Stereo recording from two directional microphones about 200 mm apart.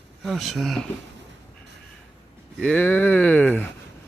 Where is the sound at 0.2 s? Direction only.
Centre (ahead or behind).